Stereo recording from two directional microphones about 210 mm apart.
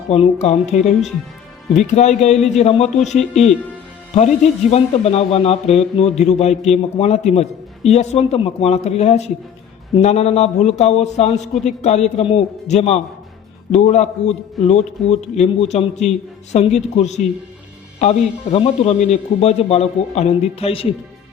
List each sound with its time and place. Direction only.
0.1 s a man's voice: 30° left (ahead or behind)
4.7 s a man's voice: 30° left (ahead or behind)